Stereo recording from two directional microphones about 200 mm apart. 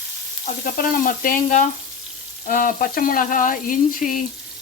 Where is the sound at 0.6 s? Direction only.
45° left (ahead or behind).